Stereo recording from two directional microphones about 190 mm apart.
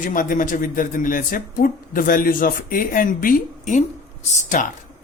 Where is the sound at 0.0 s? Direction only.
45° left (ahead or behind).